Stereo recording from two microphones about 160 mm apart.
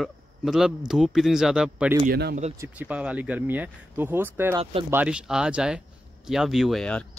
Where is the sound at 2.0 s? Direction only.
90° right.